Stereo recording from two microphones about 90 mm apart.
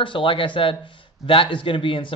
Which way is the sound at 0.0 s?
70° left (ahead or behind).